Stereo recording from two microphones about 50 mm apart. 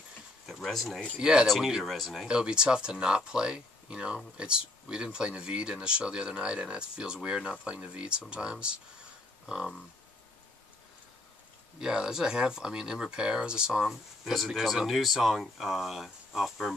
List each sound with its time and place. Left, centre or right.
0.5 s speech: centre
1.1 s speech: centre
1.9 s speech: centre
2.2 s speech: centre
11.8 s speech: centre